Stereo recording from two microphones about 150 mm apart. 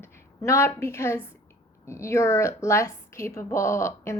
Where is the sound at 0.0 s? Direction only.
20° left (ahead or behind).